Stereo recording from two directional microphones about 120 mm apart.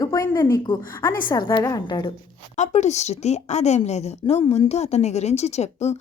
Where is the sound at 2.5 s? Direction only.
75° left (ahead or behind).